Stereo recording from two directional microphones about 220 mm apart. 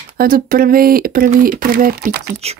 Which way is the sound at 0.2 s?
40° right (ahead or behind).